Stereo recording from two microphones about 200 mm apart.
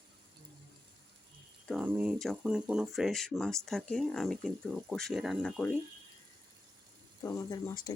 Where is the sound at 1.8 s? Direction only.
10° right (ahead or behind).